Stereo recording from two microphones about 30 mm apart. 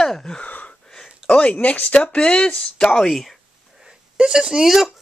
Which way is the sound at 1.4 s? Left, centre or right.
Left.